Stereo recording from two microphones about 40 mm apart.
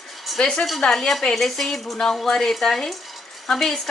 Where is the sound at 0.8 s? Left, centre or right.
Centre.